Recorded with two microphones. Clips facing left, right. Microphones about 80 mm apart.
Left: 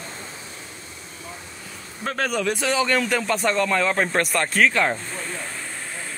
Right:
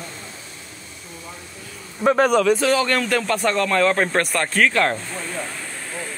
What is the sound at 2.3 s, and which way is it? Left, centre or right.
Speech, centre.